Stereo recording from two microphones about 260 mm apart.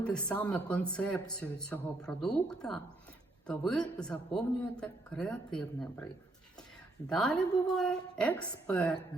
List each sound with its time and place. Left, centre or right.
0.0 s speech: centre
7.1 s speech: centre